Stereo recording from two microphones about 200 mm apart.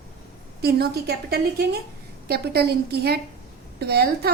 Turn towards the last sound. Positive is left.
turn(degrees=-55)  # may be behind; listen again after turning